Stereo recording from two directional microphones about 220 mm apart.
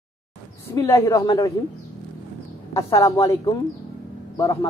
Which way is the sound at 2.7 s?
15° left (ahead or behind).